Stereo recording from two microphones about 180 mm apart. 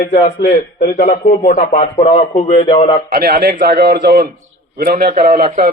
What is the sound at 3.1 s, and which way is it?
A man's voice, 60° right (ahead or behind).